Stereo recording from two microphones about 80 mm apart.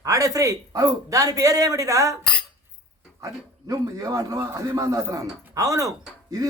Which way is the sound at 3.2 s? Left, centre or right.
Right.